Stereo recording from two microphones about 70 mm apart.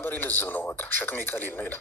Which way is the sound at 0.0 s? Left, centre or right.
Left.